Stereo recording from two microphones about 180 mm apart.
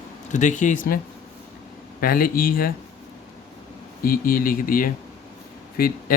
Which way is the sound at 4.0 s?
55° left (ahead or behind).